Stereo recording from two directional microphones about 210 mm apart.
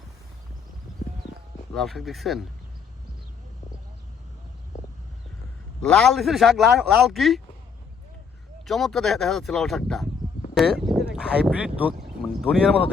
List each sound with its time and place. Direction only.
1.7 s speech: centre (ahead or behind)
5.8 s speech: 5° left (ahead or behind)
8.6 s speech: centre (ahead or behind)